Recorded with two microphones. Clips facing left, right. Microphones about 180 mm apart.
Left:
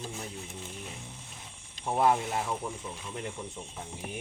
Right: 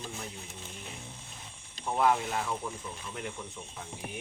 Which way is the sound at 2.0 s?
25° left (ahead or behind).